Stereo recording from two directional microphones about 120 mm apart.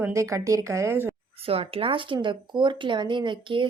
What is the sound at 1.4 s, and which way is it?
Speech, 55° right (ahead or behind).